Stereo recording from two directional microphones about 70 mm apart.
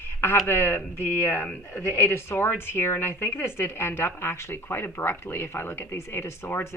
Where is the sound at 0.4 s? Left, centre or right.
Left.